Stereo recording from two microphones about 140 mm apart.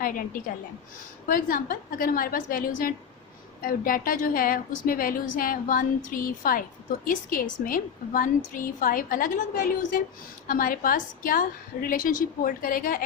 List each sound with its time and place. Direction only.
0.0 s a woman's voice: 90° left
1.3 s a woman's voice: 75° left (ahead or behind)
10.4 s a woman's voice: 90° left